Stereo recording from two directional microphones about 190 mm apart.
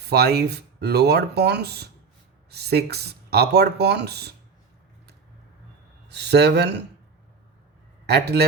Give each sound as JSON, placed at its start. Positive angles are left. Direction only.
{"t": 0.0, "sound": "speech", "side_deg": -60}
{"t": 6.1, "sound": "speech", "side_deg": -60}
{"t": 8.0, "sound": "a man's voice", "side_deg": -60}